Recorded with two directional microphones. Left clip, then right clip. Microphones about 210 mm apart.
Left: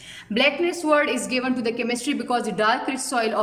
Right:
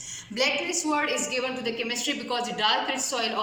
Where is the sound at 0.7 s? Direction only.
45° left (ahead or behind).